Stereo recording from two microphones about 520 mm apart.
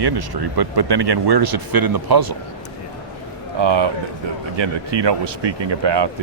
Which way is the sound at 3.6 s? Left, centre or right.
Right.